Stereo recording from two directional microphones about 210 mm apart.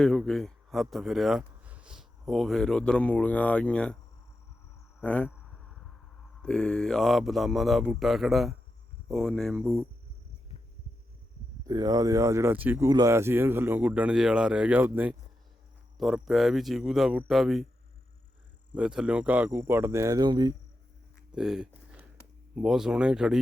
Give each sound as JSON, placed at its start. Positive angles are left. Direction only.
{"t": 0.0, "sound": "a man's voice", "side_deg": 5}
{"t": 4.9, "sound": "speech", "side_deg": 5}
{"t": 6.4, "sound": "speech", "side_deg": 5}
{"t": 11.6, "sound": "speech", "side_deg": -15}
{"t": 18.7, "sound": "speech", "side_deg": -5}
{"t": 21.3, "sound": "speech", "side_deg": -5}